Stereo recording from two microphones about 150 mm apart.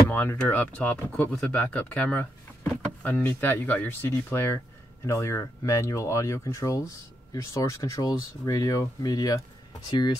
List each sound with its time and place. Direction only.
0.1 s speech: 10° left (ahead or behind); by 10.1 s 30° left (ahead or behind)